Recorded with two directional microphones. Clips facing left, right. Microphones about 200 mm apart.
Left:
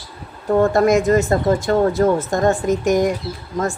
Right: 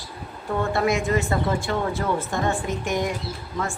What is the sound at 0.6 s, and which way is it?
Speech, 45° left (ahead or behind).